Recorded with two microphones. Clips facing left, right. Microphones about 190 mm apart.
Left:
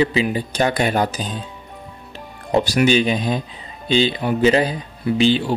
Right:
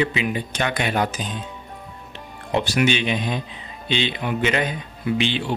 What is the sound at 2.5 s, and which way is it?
Speech, 40° left (ahead or behind).